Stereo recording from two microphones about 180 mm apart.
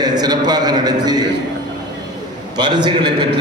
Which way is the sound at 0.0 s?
20° right (ahead or behind).